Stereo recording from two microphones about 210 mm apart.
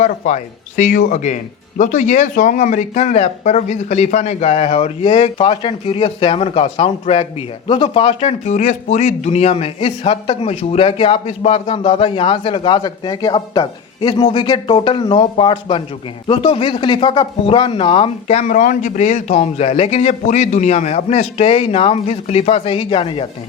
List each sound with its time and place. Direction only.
0.0 s speech: 35° left (ahead or behind)